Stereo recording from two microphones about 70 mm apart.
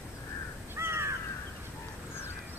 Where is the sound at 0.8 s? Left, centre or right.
Right.